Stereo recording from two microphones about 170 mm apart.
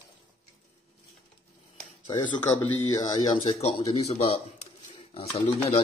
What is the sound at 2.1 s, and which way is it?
Speech, 25° left (ahead or behind).